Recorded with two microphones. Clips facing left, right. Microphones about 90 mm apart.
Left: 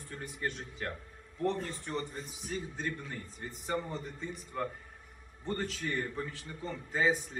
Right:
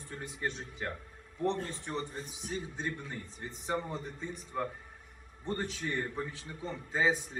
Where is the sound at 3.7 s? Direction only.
5° right (ahead or behind).